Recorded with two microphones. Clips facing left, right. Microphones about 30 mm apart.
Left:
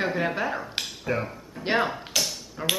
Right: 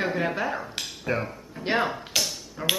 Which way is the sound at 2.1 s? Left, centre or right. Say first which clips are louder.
Even; centre.